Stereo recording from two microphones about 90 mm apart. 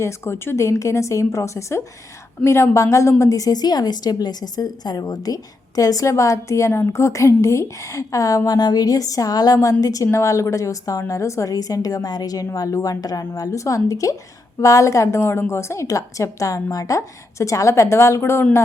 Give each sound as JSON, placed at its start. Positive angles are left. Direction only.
{"t": 0.0, "sound": "a woman's voice", "side_deg": 30}